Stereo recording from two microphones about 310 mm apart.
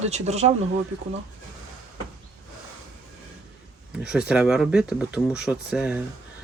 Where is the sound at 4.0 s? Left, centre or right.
Centre.